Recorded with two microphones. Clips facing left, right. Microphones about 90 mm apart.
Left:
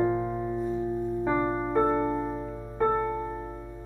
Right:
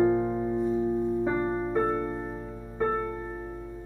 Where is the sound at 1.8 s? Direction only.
40° left (ahead or behind).